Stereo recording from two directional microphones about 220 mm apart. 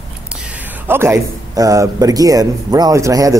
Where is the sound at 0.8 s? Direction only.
10° right (ahead or behind).